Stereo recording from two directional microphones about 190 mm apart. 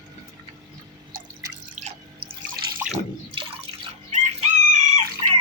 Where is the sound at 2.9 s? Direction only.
30° right (ahead or behind).